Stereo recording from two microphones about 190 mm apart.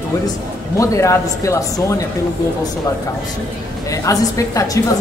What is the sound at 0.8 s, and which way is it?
Speech, 15° left (ahead or behind).